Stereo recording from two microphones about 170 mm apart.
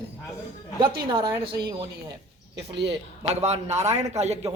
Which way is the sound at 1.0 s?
25° right (ahead or behind).